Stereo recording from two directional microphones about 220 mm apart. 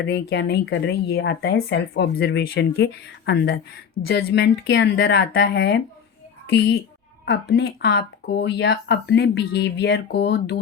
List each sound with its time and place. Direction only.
0.0 s speech: 55° left (ahead or behind)
7.3 s speech: 45° left (ahead or behind)